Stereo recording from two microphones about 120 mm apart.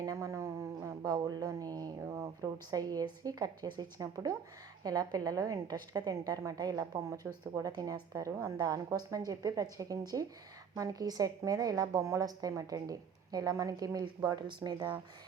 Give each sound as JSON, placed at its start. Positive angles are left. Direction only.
{"t": 0.0, "sound": "a woman's voice", "side_deg": -25}